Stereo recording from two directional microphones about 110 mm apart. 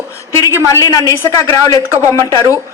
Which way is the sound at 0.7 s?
30° left (ahead or behind).